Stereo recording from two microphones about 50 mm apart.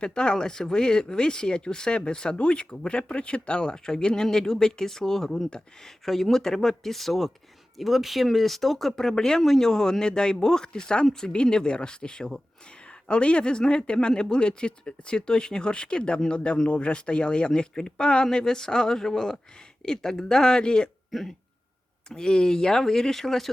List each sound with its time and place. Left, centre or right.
0.0 s speech: centre
21.1 s speech: centre
22.1 s speech: centre